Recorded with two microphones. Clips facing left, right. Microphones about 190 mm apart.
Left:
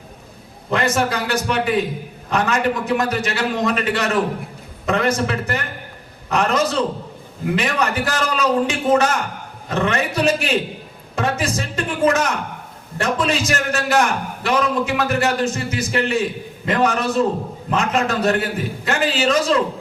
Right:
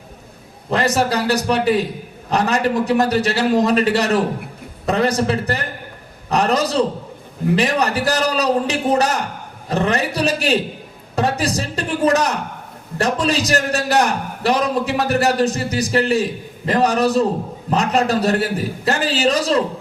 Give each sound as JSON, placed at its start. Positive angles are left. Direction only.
{"t": 0.7, "sound": "a man's voice", "side_deg": -35}